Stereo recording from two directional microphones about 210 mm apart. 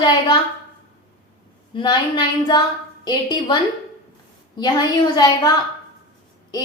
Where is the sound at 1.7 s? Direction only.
20° left (ahead or behind).